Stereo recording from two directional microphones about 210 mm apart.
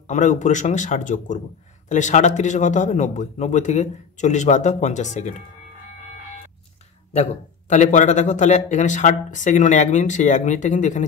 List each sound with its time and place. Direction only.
0.1 s a man's voice: 35° left (ahead or behind)
7.7 s a man's voice: 35° left (ahead or behind)